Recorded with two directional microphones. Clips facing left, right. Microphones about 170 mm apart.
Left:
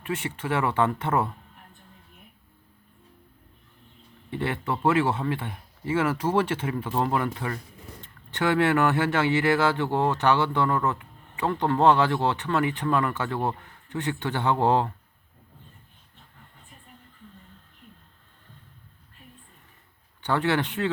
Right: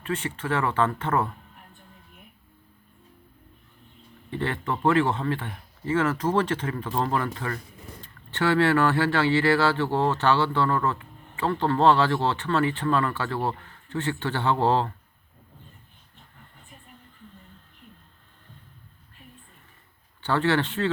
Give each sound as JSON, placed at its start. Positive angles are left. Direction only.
{"t": 0.0, "sound": "speech", "side_deg": 15}
{"t": 4.3, "sound": "speech", "side_deg": 10}
{"t": 20.2, "sound": "speech", "side_deg": 15}